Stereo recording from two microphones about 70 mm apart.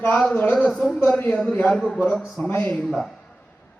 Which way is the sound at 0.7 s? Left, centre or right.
Centre.